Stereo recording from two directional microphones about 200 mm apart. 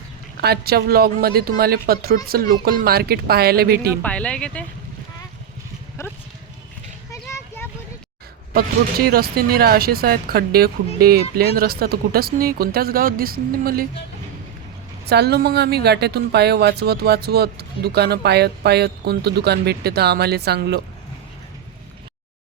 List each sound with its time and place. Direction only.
0.4 s a woman's voice: 50° right (ahead or behind)
4.0 s speech: 5° left (ahead or behind)
6.0 s speech: 15° left (ahead or behind)
7.1 s vehicle: 15° left (ahead or behind)
9.0 s a woman's voice: 50° right (ahead or behind)
15.0 s a woman's voice: 55° right (ahead or behind)